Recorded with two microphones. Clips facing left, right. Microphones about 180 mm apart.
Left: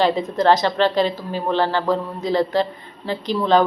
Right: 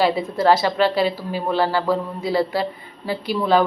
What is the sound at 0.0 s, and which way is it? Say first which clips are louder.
Speech: left 1 dB; 10° right (ahead or behind).